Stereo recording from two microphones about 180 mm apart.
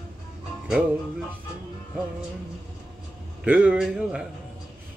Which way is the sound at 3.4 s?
5° right (ahead or behind).